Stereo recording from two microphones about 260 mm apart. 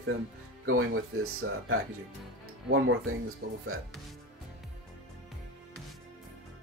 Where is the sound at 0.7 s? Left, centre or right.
Right.